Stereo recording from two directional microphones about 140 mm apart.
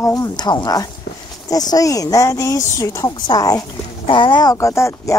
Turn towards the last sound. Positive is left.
turn(degrees=20)  # may be behind; listen again after turning